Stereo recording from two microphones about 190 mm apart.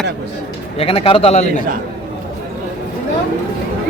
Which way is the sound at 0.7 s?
30° left (ahead or behind).